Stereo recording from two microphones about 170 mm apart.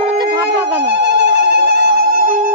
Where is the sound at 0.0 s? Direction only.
35° right (ahead or behind).